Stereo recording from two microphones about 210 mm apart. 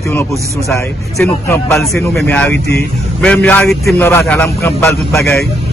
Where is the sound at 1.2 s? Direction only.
5° left (ahead or behind).